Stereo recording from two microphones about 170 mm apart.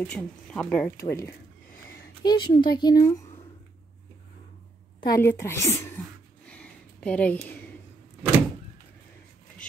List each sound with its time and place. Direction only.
0.0 s speech: 5° left (ahead or behind)
2.2 s speech: 25° left (ahead or behind)
5.0 s speech: 15° left (ahead or behind)
6.4 s a sound: 5° left (ahead or behind)